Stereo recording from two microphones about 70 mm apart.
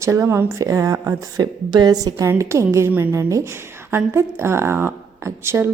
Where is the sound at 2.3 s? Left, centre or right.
Right.